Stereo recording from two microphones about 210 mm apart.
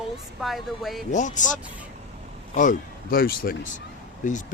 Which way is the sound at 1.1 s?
35° left (ahead or behind).